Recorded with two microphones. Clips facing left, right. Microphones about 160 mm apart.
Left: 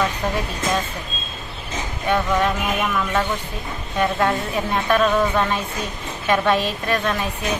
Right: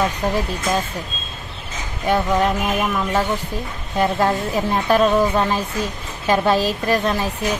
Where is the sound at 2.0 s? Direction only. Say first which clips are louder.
Right 2 dB; 30° right (ahead or behind).